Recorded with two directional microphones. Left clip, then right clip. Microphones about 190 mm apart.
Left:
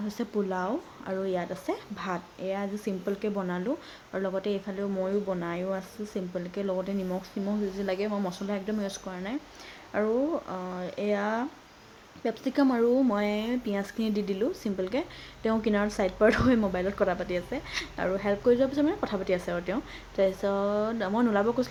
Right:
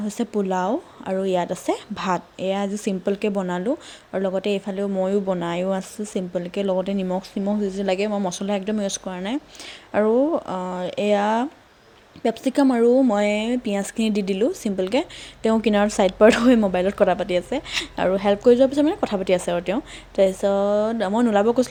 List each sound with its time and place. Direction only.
0.1 s speech: 35° right (ahead or behind)